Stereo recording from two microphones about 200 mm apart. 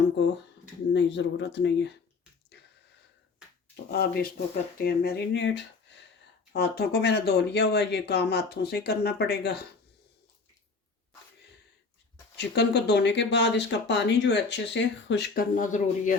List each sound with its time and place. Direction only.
0.9 s speech: 60° left (ahead or behind)
3.9 s speech: 50° left (ahead or behind)
12.4 s speech: 55° left (ahead or behind); by 16.1 s 40° left (ahead or behind)